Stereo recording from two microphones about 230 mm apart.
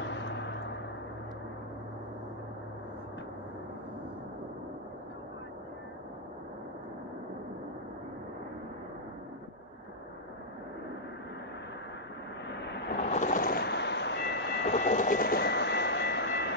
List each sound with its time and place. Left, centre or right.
0.0 s a sound: left
13.1 s train: left
14.9 s vehicle: left